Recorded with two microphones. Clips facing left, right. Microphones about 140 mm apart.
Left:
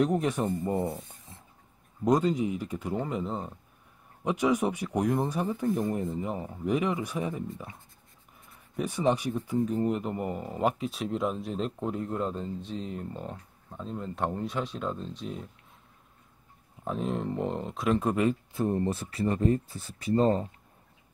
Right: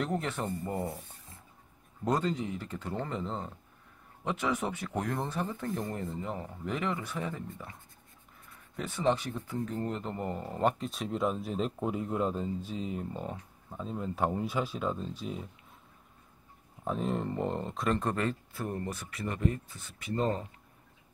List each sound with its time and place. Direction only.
0.0 s speech: 15° left (ahead or behind)
2.0 s speech: 15° left (ahead or behind)
8.7 s a man's voice: 15° left (ahead or behind); by 15.5 s centre (ahead or behind)
16.8 s speech: centre (ahead or behind); by 20.4 s 35° left (ahead or behind)